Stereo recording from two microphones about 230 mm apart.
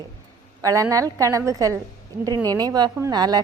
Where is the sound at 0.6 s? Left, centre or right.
Centre.